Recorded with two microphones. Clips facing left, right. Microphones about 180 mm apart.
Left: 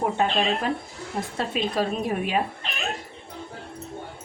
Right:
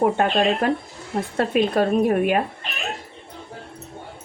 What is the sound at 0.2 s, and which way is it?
A woman's voice, 60° right (ahead or behind).